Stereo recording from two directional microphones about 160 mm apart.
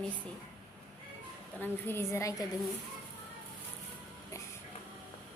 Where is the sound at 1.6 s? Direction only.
15° left (ahead or behind).